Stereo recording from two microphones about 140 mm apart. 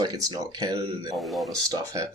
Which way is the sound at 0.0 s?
30° right (ahead or behind).